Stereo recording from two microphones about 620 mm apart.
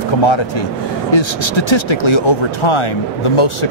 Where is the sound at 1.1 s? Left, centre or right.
Left.